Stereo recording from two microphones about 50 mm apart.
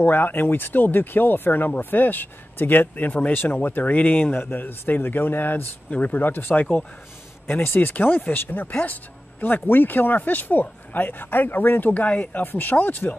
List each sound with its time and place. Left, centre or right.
0.0 s speech: left
5.9 s speech: left
12.4 s speech: left